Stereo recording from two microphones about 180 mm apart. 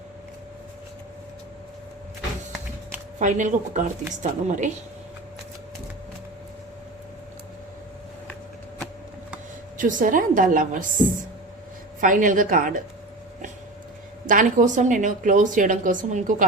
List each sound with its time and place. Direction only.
3.2 s a woman's voice: 45° right (ahead or behind)
9.7 s a woman's voice: 45° right (ahead or behind)
11.9 s a woman's voice: 50° right (ahead or behind)
14.3 s a woman's voice: 45° right (ahead or behind)